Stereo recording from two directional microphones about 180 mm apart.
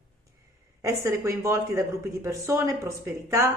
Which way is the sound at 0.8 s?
15° right (ahead or behind).